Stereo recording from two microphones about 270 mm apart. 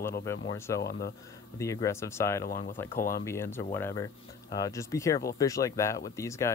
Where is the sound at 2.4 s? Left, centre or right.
Left.